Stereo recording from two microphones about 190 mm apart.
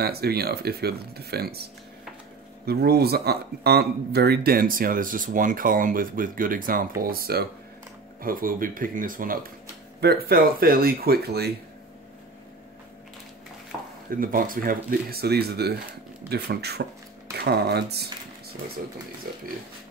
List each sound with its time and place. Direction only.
0.0 s speech: 55° right (ahead or behind)
2.6 s speech: 55° right (ahead or behind)
14.1 s speech: 45° right (ahead or behind)
19.2 s speech: 50° right (ahead or behind)